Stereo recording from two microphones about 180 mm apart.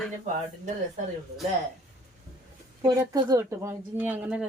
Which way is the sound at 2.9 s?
20° right (ahead or behind).